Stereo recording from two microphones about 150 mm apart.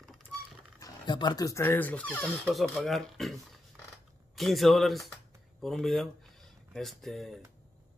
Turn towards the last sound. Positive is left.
turn(degrees=0)  # may be behind; listen again after turning